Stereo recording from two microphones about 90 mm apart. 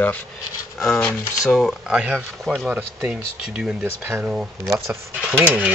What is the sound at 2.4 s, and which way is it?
Speech, 5° right (ahead or behind).